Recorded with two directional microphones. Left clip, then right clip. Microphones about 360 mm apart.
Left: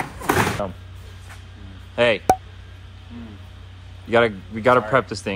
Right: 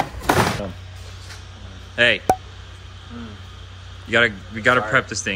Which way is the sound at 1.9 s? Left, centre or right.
Centre.